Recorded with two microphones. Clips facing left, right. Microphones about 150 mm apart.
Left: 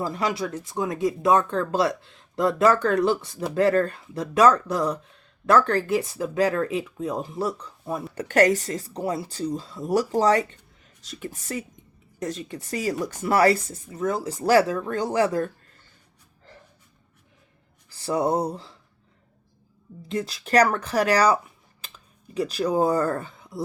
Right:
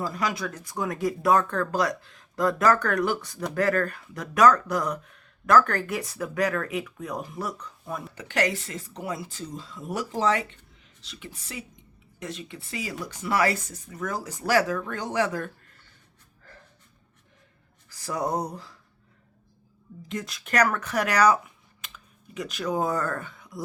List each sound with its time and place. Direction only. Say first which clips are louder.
0.0 s speech: left 3 dB; 25° left (ahead or behind)
8.1 s speech: left 8 dB; 45° left (ahead or behind)
17.8 s speech: left 6 dB; 30° left (ahead or behind)
20.1 s speech: left 6 dB; 30° left (ahead or behind)